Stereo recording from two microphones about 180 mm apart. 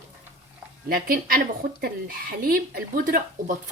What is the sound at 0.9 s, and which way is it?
Speech, 55° right (ahead or behind).